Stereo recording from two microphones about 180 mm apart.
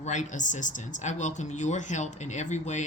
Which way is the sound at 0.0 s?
40° left (ahead or behind).